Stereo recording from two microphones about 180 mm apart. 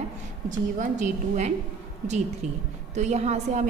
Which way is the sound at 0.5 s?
45° right (ahead or behind).